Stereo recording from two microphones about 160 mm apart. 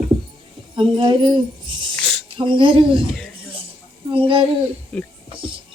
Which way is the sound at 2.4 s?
30° right (ahead or behind).